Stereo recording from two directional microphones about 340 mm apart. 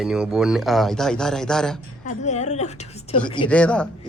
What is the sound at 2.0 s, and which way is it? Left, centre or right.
A woman's voice, left.